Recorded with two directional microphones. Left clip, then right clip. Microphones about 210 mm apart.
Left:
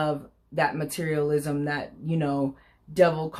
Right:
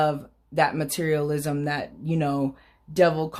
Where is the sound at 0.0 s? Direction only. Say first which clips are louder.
Right 4 dB; 30° right (ahead or behind).